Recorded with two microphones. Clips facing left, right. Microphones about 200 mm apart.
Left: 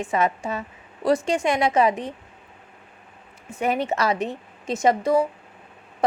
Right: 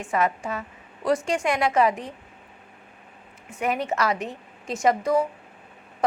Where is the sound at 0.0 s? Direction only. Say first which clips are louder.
Left 2 dB; 20° left (ahead or behind).